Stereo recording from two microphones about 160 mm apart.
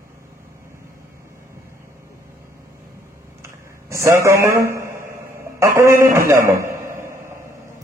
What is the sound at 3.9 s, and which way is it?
A man's voice, 20° right (ahead or behind).